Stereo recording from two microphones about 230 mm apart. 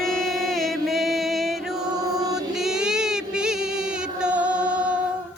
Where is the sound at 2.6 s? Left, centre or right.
Centre.